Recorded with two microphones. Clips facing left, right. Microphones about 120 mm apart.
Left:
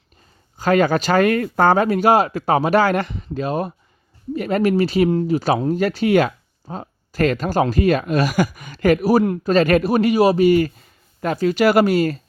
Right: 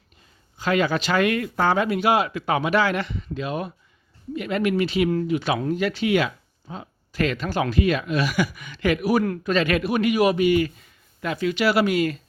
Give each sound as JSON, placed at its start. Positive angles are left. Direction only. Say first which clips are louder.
{"t": 0.5, "sound": "speech", "louder": "left 5 dB", "side_deg": 45}
{"t": 5.0, "sound": "speech", "louder": "left 4 dB", "side_deg": 25}
{"t": 5.7, "sound": "speech", "louder": "left 4 dB", "side_deg": 40}